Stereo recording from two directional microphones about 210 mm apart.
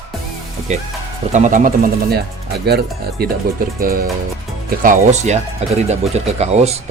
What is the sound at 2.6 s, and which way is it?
A man's voice, 50° right (ahead or behind).